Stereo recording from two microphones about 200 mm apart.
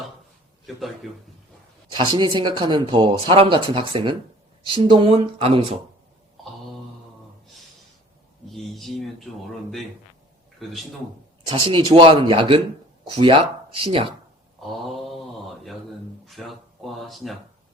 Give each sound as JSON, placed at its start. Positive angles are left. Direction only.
{"t": 1.0, "sound": "a man's voice", "side_deg": 0}
{"t": 2.0, "sound": "speech", "side_deg": -25}
{"t": 8.4, "sound": "speech", "side_deg": 0}
{"t": 10.6, "sound": "speech", "side_deg": 0}
{"t": 11.4, "sound": "speech", "side_deg": -25}
{"t": 14.6, "sound": "mantra", "side_deg": 0}
{"t": 16.2, "sound": "a sound", "side_deg": 0}